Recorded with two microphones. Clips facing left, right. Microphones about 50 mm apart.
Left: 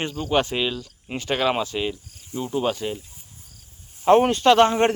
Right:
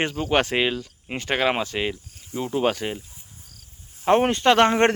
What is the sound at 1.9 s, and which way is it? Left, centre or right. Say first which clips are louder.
Speech: even; right.